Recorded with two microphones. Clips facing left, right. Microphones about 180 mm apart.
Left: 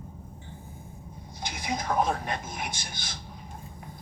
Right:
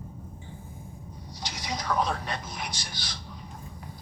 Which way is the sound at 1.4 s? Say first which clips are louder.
Left 3 dB; 55° left (ahead or behind).